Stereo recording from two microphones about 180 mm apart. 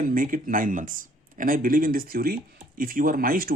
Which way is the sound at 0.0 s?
50° right (ahead or behind).